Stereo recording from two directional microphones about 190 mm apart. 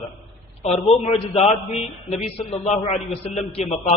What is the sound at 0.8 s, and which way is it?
A man's voice, 35° left (ahead or behind).